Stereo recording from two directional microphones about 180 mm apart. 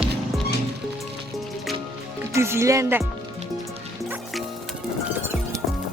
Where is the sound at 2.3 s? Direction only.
15° right (ahead or behind).